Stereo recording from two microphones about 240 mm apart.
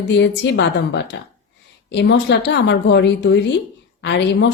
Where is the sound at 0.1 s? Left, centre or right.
Left.